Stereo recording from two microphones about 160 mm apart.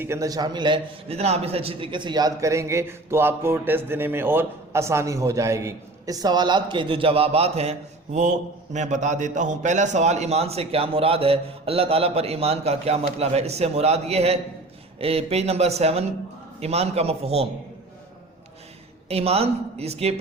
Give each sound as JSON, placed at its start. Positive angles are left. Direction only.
{"t": 0.0, "sound": "a man's voice", "side_deg": -20}
{"t": 19.0, "sound": "a man's voice", "side_deg": -40}